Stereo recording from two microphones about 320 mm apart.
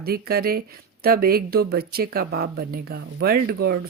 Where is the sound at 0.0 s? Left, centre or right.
Right.